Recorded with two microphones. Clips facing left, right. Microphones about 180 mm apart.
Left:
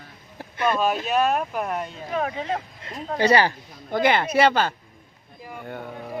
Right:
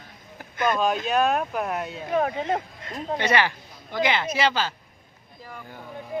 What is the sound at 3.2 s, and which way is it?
Speech, 35° left (ahead or behind).